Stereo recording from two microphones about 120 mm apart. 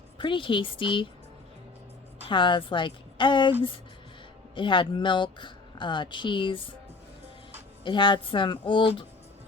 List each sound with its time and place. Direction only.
0.2 s speech: 45° left (ahead or behind)
2.2 s speech: 45° left (ahead or behind)
4.5 s speech: 45° left (ahead or behind)
7.9 s speech: 40° left (ahead or behind)